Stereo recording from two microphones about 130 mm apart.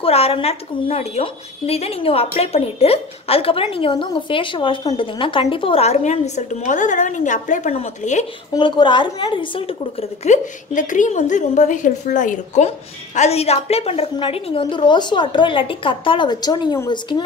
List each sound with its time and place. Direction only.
0.0 s a woman's voice: 50° left (ahead or behind)
8.5 s a woman's voice: 35° left (ahead or behind)
10.2 s a woman's voice: 70° left (ahead or behind)
12.6 s a woman's voice: 55° left (ahead or behind); by 17.2 s 30° left (ahead or behind)